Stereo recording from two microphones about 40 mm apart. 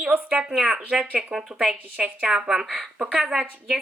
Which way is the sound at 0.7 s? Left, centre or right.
Right.